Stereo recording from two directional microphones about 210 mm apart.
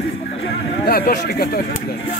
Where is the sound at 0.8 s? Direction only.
45° left (ahead or behind).